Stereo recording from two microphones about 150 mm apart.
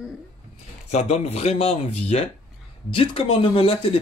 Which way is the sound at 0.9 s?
45° left (ahead or behind).